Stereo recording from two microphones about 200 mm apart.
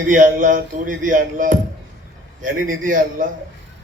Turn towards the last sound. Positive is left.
turn(degrees=-45)  # may be behind; listen again after turning